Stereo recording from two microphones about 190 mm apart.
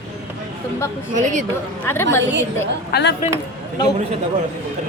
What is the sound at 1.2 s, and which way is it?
Speech, 40° right (ahead or behind).